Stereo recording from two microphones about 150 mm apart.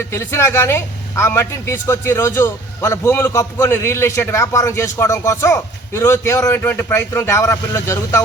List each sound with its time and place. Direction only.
0.1 s speech: 15° left (ahead or behind)